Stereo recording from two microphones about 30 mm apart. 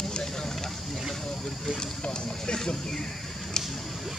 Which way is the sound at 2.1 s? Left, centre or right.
Left.